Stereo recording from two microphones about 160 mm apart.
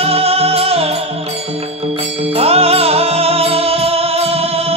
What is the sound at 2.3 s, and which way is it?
Music, 40° right (ahead or behind).